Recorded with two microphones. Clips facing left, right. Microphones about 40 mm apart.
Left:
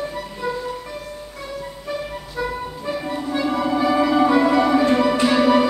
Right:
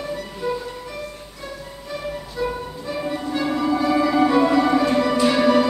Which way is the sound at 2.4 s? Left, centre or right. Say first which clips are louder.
Right 1 dB; left.